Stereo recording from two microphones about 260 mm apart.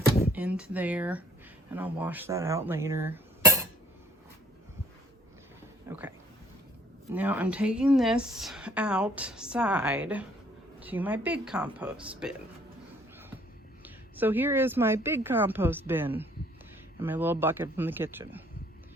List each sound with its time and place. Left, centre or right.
0.3 s a woman's voice: centre
5.9 s speech: centre
7.1 s a woman's voice: centre
13.8 s a woman's voice: centre